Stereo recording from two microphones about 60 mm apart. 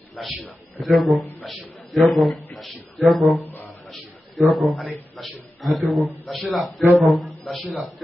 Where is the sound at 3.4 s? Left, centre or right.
Left.